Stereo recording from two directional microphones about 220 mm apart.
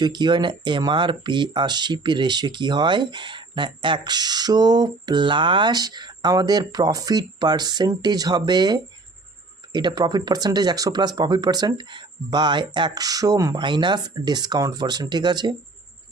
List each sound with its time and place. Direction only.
0.0 s speech: 20° right (ahead or behind)